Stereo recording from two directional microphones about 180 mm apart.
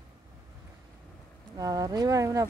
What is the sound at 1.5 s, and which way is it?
Speech, 20° right (ahead or behind).